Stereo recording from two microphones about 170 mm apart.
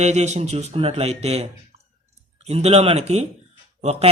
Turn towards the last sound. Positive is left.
turn(degrees=-40)  # may be behind; listen again after turning